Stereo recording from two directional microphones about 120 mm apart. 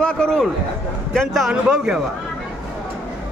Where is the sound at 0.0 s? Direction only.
5° left (ahead or behind).